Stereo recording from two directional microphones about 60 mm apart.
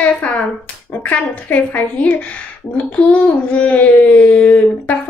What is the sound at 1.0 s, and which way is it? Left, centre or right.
Speech, left.